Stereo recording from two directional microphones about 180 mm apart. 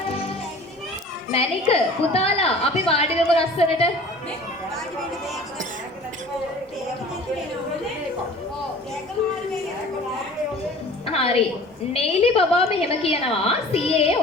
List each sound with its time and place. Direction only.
1.3 s a woman's voice: 35° left (ahead or behind)
11.0 s a woman's voice: 35° left (ahead or behind)